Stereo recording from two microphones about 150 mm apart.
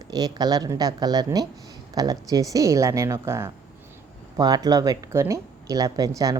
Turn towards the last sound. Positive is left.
turn(degrees=-25)  # may be behind; listen again after turning